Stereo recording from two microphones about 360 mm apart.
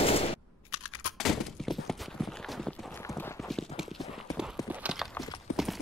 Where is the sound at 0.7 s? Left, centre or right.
Left.